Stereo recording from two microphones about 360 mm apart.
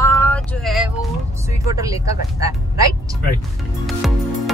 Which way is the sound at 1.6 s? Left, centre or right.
Centre.